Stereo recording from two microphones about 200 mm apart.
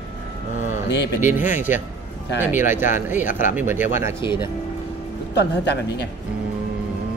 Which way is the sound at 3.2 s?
40° left (ahead or behind).